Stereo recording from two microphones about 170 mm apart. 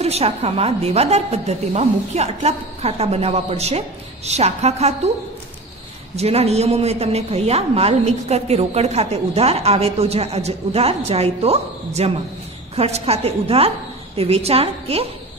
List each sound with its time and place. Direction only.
0.0 s a woman's voice: 35° right (ahead or behind)
6.1 s a woman's voice: 40° right (ahead or behind)